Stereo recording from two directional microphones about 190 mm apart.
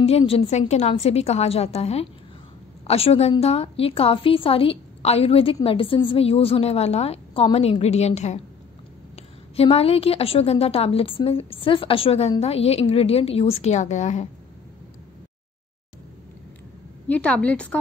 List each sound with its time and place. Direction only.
0.2 s a woman's voice: 35° left (ahead or behind)
17.1 s a woman's voice: 5° left (ahead or behind)